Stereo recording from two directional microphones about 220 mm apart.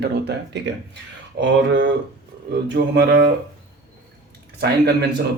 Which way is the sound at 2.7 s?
50° right (ahead or behind).